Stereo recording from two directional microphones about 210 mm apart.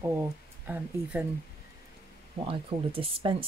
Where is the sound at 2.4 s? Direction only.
25° right (ahead or behind).